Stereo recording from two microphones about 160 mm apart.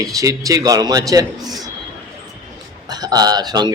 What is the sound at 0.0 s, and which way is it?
A man's voice, 20° right (ahead or behind).